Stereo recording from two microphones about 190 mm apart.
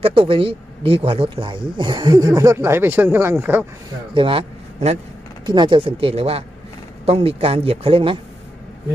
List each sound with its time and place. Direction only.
0.0 s speech: 30° right (ahead or behind); by 3.6 s 10° right (ahead or behind)
4.1 s a man's voice: 30° right (ahead or behind)